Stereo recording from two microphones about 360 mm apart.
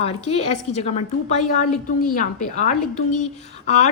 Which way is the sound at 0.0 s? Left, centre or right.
Centre.